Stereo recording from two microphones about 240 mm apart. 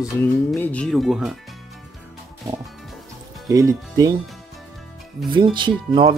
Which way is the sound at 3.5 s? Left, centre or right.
Centre.